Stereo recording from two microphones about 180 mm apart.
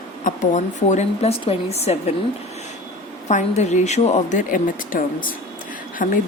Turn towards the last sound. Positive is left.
turn(degrees=50)  # may be behind; listen again after turning